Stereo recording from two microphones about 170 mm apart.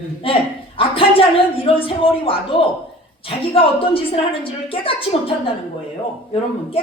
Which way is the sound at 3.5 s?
35° left (ahead or behind).